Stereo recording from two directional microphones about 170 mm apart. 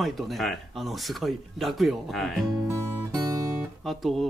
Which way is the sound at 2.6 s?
15° right (ahead or behind).